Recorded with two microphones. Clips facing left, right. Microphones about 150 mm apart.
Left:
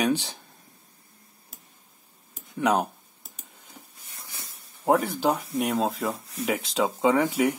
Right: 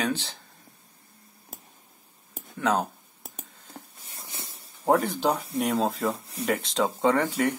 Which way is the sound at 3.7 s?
55° right (ahead or behind).